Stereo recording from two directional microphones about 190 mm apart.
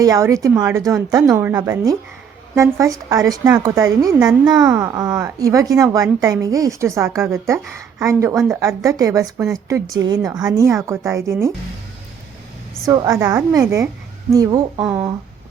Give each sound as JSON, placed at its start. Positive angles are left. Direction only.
{"t": 0.0, "sound": "a woman's voice", "side_deg": -15}
{"t": 12.8, "sound": "a woman's voice", "side_deg": -20}